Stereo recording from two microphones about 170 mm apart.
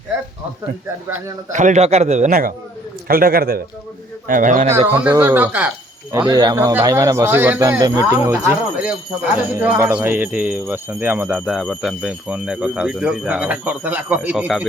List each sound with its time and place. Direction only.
1.5 s a man's voice: 45° right (ahead or behind); by 3.6 s 60° right (ahead or behind)
4.3 s a man's voice: 50° right (ahead or behind)
4.9 s speech: 10° right (ahead or behind)
6.1 s speech: 25° right (ahead or behind); by 14.7 s 5° right (ahead or behind)